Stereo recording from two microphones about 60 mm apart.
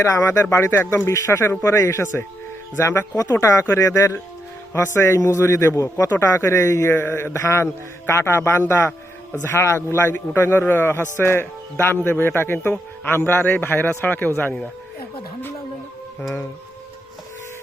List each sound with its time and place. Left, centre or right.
0.2 s speech: left
1.0 s speech: left
4.7 s speech: left